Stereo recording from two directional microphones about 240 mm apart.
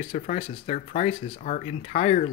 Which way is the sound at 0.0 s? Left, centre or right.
Left.